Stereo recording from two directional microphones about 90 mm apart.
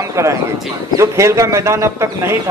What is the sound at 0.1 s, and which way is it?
A man's voice, 35° right (ahead or behind).